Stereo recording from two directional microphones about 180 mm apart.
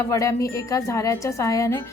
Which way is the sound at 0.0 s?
15° left (ahead or behind).